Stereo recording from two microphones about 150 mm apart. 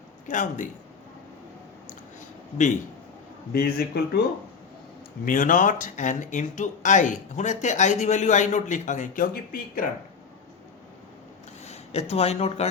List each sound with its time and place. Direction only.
0.3 s speech: 60° left (ahead or behind)
3.5 s a man's voice: 90° left
5.2 s speech: 65° left (ahead or behind); by 9.8 s 85° left
11.6 s speech: 45° left (ahead or behind)